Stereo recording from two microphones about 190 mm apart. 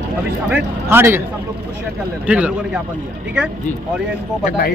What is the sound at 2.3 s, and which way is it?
Speech, 5° right (ahead or behind).